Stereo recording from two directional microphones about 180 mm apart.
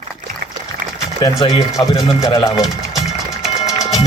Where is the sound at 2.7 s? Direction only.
Centre (ahead or behind).